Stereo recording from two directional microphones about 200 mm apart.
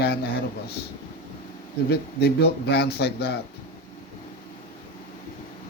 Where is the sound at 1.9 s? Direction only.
55° left (ahead or behind).